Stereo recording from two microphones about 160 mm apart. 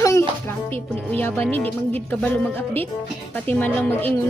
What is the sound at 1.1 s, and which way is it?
Speech, 10° left (ahead or behind).